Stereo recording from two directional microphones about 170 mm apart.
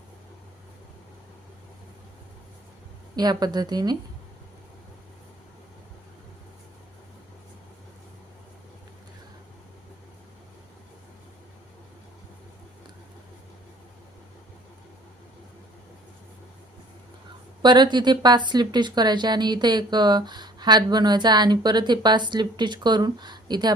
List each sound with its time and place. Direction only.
3.2 s a woman's voice: 25° right (ahead or behind)
17.6 s a woman's voice: 25° right (ahead or behind)